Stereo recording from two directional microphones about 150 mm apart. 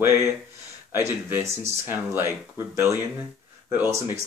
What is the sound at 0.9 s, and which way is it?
Speech, 15° right (ahead or behind).